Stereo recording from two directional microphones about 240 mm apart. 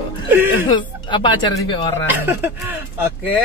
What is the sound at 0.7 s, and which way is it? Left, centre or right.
Speech, centre.